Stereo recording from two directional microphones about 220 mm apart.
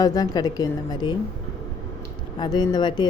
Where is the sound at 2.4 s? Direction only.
20° left (ahead or behind).